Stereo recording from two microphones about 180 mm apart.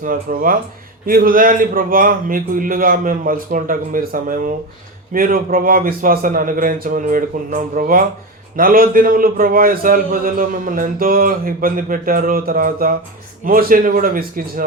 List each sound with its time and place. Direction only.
0.0 s a man's voice: 50° right (ahead or behind)